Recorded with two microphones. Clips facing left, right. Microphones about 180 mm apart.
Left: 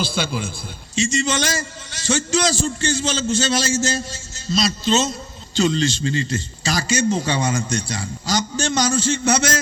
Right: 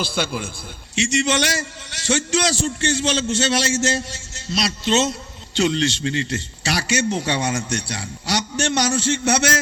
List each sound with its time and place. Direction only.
0.0 s a man's voice: 55° right (ahead or behind)
0.9 s a man's voice: 70° right (ahead or behind)